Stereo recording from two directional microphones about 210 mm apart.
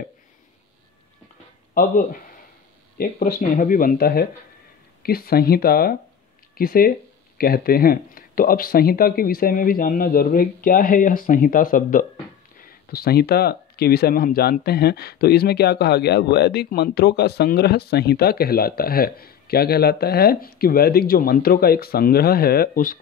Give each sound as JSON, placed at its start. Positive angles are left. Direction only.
{"t": 1.7, "sound": "speech", "side_deg": 40}